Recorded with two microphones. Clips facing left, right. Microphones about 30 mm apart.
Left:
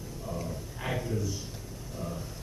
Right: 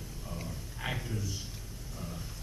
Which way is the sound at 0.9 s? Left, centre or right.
Centre.